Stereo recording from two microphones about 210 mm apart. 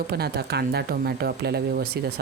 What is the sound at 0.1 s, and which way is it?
Speech, 50° right (ahead or behind).